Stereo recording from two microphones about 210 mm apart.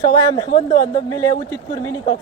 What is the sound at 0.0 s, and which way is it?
Speech, 15° left (ahead or behind).